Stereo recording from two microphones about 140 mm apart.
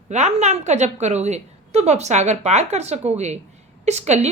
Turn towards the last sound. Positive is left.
turn(degrees=-55)  # may be behind; listen again after turning